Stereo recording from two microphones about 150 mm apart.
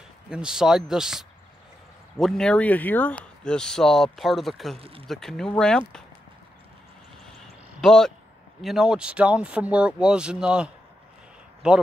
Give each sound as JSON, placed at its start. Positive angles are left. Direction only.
{"t": 0.3, "sound": "speech", "side_deg": -5}
{"t": 4.7, "sound": "speech", "side_deg": -40}
{"t": 5.0, "sound": "speech", "side_deg": 0}
{"t": 7.8, "sound": "speech", "side_deg": 5}